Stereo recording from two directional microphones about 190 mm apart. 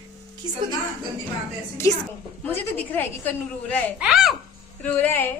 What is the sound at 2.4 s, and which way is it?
A woman's voice, 10° left (ahead or behind).